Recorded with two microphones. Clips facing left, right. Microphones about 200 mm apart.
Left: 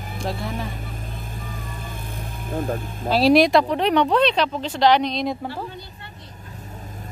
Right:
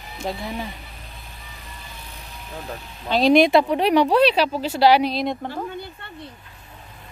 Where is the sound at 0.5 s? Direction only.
50° left (ahead or behind).